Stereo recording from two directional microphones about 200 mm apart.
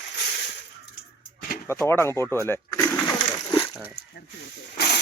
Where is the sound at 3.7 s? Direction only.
10° right (ahead or behind).